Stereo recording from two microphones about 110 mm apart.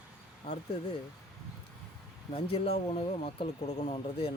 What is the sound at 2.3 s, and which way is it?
Speech, 60° left (ahead or behind).